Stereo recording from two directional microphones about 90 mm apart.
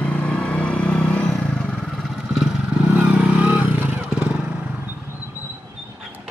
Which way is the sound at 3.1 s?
15° right (ahead or behind).